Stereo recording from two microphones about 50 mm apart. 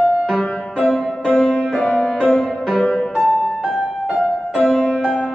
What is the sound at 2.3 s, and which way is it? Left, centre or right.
Music, centre.